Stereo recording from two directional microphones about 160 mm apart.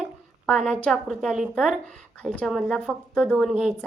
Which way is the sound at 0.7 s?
Centre (ahead or behind).